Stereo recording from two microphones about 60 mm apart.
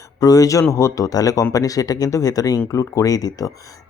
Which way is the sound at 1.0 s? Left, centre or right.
Left.